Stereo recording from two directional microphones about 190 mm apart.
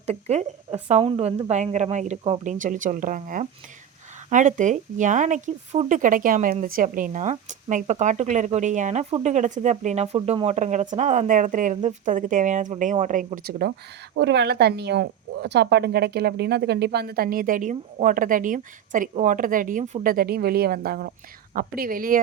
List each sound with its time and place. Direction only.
0.0 s a woman's voice: 35° right (ahead or behind)